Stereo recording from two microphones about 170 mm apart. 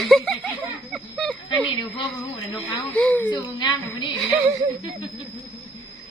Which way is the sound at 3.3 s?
25° left (ahead or behind).